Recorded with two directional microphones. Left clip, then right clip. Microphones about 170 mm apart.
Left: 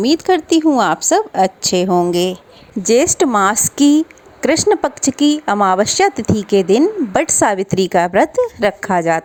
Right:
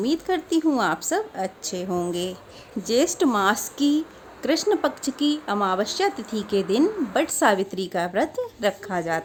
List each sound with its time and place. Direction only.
0.0 s a woman's voice: 45° left (ahead or behind)